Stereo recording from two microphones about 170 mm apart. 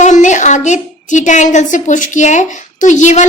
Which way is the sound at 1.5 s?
50° left (ahead or behind).